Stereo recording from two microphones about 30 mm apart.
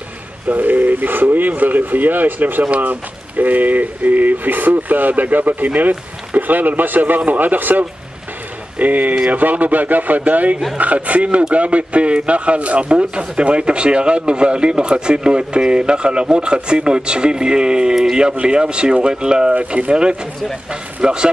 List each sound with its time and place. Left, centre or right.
0.5 s speech: right
2.7 s speech: right
7.2 s speech: right
8.7 s a man's voice: right